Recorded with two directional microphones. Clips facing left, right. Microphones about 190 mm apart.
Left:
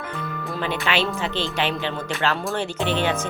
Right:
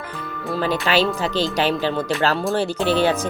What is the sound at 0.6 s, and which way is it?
Speech, 40° right (ahead or behind).